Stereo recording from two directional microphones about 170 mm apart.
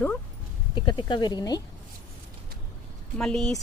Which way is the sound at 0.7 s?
25° left (ahead or behind).